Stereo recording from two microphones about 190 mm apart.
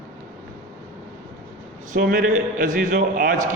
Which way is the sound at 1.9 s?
50° right (ahead or behind).